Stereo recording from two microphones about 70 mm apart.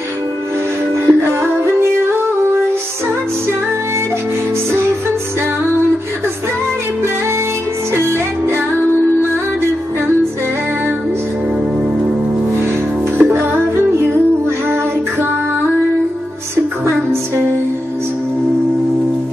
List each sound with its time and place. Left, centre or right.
1.0 s music: right
13.2 s music: right
16.8 s music: right